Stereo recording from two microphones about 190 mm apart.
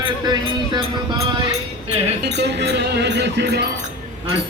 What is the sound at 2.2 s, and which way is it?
Music, 60° right (ahead or behind).